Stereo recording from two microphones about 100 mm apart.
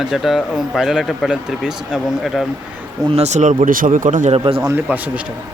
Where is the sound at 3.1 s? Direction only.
90° right.